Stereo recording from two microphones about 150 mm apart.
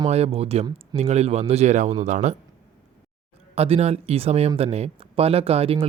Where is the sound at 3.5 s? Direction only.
45° right (ahead or behind).